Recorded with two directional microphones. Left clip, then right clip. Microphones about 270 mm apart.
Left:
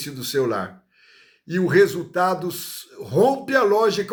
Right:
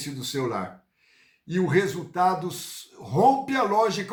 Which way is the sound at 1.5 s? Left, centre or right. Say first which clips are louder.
Left 7 dB; centre.